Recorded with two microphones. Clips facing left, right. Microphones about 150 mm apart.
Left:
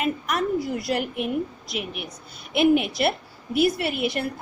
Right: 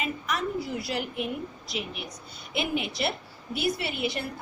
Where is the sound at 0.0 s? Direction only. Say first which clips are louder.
Left 6 dB; 55° left (ahead or behind).